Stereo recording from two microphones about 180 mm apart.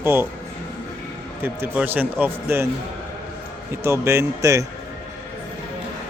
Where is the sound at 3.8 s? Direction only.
15° right (ahead or behind).